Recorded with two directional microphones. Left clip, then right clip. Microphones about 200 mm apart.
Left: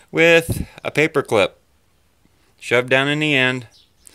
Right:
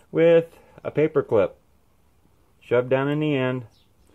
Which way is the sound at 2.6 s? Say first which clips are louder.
Left 5 dB; 15° left (ahead or behind).